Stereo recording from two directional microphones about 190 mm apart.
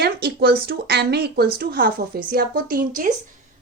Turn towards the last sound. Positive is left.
turn(degrees=-45)  # may be behind; listen again after turning